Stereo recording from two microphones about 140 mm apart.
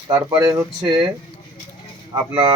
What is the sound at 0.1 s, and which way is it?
Speech, 25° right (ahead or behind).